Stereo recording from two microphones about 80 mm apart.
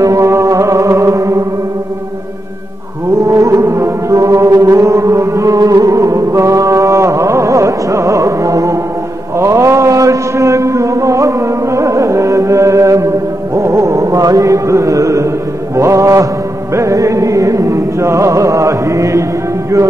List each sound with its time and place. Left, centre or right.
0.0 s music: right
3.3 s music: right
9.4 s mantra: right
13.6 s music: right
15.7 s mantra: right
16.7 s music: right